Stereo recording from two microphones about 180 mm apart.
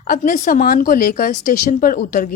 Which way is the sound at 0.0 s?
50° left (ahead or behind).